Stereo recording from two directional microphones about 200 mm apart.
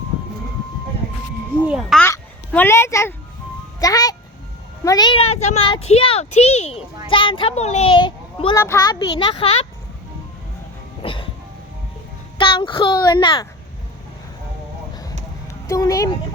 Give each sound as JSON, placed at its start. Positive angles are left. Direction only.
{"t": 1.6, "sound": "music", "side_deg": 0}
{"t": 2.0, "sound": "a sound", "side_deg": 10}
{"t": 3.8, "sound": "music", "side_deg": 15}
{"t": 4.8, "sound": "a child's voice", "side_deg": 20}
{"t": 11.0, "sound": "music", "side_deg": 25}
{"t": 12.4, "sound": "a child's voice", "side_deg": 25}
{"t": 15.6, "sound": "speech", "side_deg": 15}